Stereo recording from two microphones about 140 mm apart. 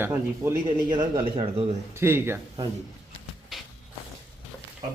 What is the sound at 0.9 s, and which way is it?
Speech, 30° right (ahead or behind).